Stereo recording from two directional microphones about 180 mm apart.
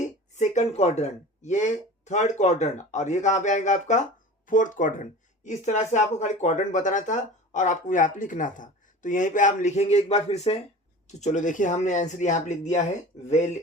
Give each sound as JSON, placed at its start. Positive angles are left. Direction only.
{"t": 0.0, "sound": "speech", "side_deg": 40}